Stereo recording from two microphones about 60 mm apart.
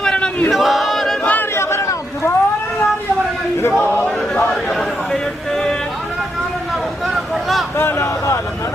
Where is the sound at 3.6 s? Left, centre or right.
Left.